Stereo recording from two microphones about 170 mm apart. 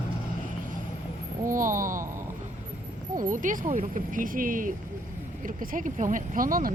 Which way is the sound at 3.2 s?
50° right (ahead or behind).